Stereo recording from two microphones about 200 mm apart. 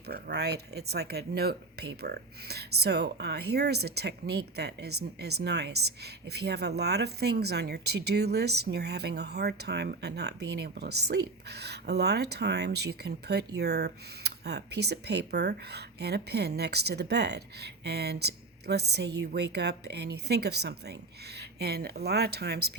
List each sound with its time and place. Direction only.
0.1 s speech: 55° right (ahead or behind)